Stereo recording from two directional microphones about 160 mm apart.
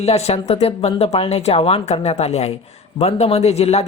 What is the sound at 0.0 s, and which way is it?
Speech, 40° left (ahead or behind).